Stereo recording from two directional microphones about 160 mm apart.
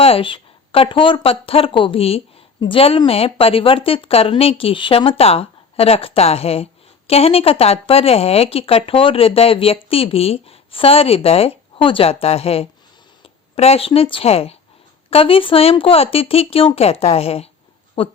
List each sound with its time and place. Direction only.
0.0 s speech: 35° left (ahead or behind)